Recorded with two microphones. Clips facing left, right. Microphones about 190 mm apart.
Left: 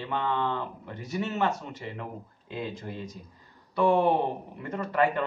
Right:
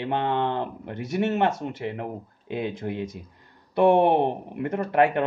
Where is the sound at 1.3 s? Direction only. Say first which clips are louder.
Right 5 dB; 60° right (ahead or behind).